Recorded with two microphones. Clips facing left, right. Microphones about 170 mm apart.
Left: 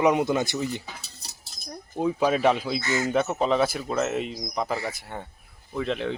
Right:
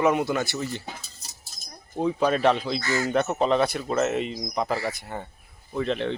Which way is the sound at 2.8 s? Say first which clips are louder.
Even; 20° left (ahead or behind).